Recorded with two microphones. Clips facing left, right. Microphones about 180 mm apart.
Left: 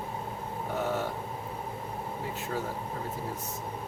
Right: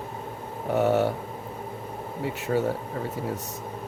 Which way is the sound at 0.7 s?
70° right (ahead or behind).